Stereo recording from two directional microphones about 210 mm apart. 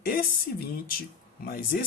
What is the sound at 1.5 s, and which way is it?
Speech, 45° left (ahead or behind).